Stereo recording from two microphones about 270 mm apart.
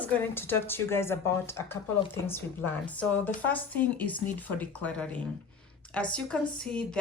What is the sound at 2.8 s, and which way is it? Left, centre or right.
A woman's voice, centre.